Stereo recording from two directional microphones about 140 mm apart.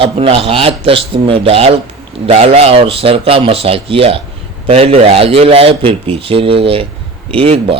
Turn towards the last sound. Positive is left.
turn(degrees=-40)  # may be behind; listen again after turning